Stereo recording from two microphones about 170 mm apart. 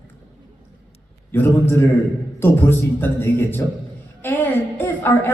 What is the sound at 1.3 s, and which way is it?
A woman's voice, 15° left (ahead or behind).